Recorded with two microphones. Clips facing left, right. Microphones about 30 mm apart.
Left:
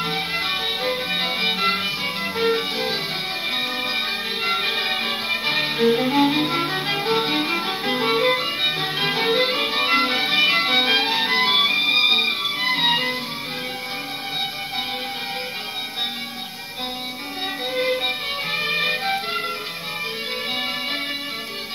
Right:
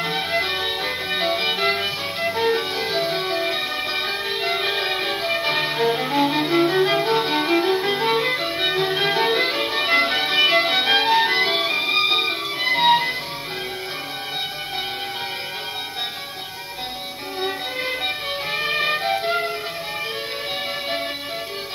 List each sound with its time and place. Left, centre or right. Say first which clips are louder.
0.0 s violin: right 1 dB; centre
2.3 s music: left 1 dB; centre
3.3 s music: right 2 dB; centre
8.5 s violin: right 2 dB; centre
12.6 s music: right 4 dB; centre
17.7 s music: left 3 dB; centre